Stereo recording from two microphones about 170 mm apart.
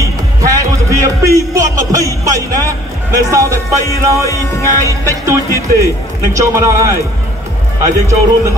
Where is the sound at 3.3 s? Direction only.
15° right (ahead or behind).